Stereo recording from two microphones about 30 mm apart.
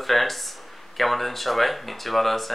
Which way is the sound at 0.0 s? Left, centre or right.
Centre.